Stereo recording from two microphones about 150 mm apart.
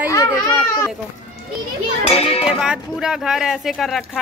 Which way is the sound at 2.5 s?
5° right (ahead or behind).